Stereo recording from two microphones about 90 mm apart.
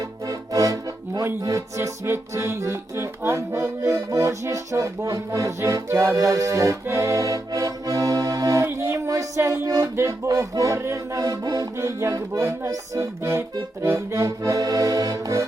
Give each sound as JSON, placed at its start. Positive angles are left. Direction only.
{"t": 0.3, "sound": "accordion", "side_deg": -40}
{"t": 6.1, "sound": "music", "side_deg": -40}
{"t": 11.8, "sound": "music", "side_deg": -30}
{"t": 13.8, "sound": "accordion", "side_deg": -35}